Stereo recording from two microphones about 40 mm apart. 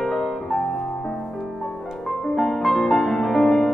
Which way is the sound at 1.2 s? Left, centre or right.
Centre.